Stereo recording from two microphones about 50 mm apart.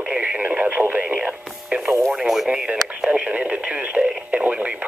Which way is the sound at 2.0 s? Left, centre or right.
Centre.